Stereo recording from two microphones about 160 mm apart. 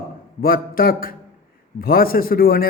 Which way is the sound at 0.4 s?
65° left (ahead or behind).